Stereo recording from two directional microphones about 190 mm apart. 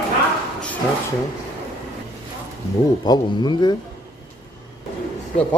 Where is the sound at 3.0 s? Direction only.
20° left (ahead or behind).